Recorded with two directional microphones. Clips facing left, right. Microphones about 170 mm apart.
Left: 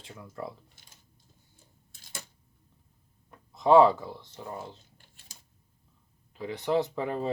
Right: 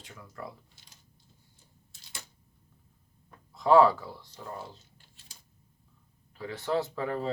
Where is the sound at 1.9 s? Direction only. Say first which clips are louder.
Left 4 dB; 45° left (ahead or behind).